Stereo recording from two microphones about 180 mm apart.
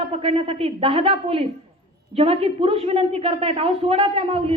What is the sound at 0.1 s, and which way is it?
A woman's voice, 30° right (ahead or behind).